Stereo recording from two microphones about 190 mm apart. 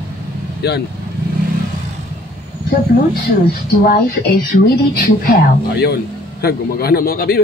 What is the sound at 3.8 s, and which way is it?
A man's voice, 55° left (ahead or behind).